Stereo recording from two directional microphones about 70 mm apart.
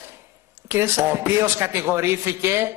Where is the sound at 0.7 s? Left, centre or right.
Right.